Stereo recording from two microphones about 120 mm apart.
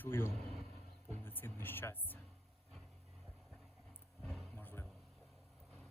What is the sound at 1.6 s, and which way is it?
Speech, 20° left (ahead or behind).